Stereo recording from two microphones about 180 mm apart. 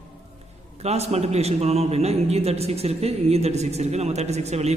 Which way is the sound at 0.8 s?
35° right (ahead or behind).